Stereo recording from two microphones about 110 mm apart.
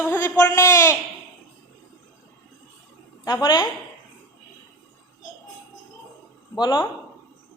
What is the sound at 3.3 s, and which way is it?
Speech, 40° left (ahead or behind).